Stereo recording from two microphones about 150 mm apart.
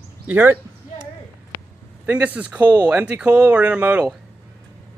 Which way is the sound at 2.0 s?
10° right (ahead or behind).